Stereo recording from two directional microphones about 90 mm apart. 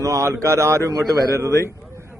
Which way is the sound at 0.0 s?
35° right (ahead or behind).